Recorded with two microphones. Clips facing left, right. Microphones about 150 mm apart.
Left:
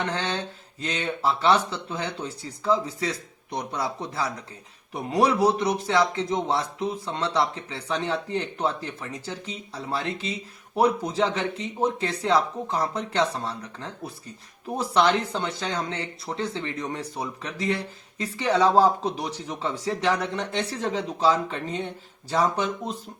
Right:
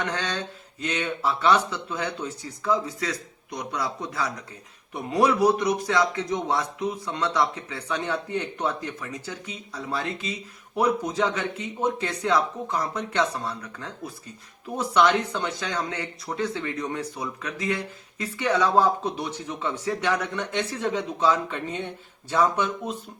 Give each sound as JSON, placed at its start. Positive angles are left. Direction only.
{"t": 0.0, "sound": "a man's voice", "side_deg": 30}